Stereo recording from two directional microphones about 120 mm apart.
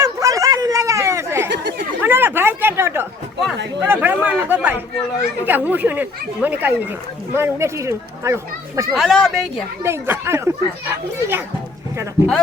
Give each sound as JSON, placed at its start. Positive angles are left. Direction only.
{"t": 0.0, "sound": "chatter", "side_deg": -25}
{"t": 2.0, "sound": "a sound", "side_deg": -15}
{"t": 3.8, "sound": "speech", "side_deg": -15}
{"t": 9.0, "sound": "speech", "side_deg": 0}
{"t": 9.8, "sound": "speech", "side_deg": -20}